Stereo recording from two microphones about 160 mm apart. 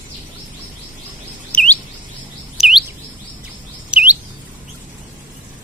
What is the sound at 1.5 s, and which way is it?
Chirp, 10° left (ahead or behind).